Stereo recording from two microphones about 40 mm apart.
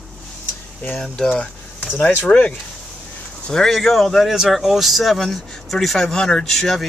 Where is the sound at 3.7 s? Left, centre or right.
Centre.